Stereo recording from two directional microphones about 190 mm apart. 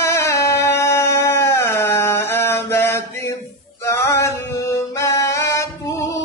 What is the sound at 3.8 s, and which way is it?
Music, 15° left (ahead or behind).